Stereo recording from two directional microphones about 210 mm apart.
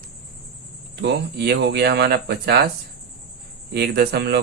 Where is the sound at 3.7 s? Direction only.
50° right (ahead or behind).